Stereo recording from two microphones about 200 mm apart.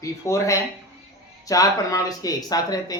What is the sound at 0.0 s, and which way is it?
Speech, 15° left (ahead or behind).